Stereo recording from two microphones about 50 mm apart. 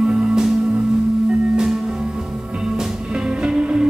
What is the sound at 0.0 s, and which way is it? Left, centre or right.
Music, centre.